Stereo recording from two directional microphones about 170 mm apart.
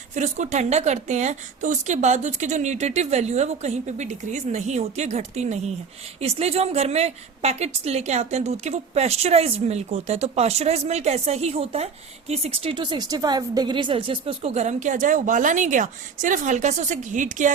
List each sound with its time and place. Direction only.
0.1 s a woman's voice: 45° right (ahead or behind)